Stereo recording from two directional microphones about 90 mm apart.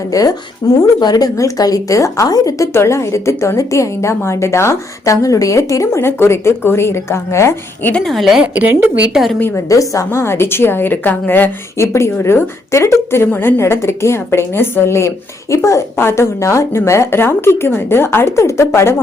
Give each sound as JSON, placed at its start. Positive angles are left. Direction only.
{"t": 0.1, "sound": "a woman's voice", "side_deg": 40}
{"t": 2.7, "sound": "a woman's voice", "side_deg": 30}
{"t": 8.0, "sound": "a woman's voice", "side_deg": 0}
{"t": 9.6, "sound": "a woman's voice", "side_deg": 35}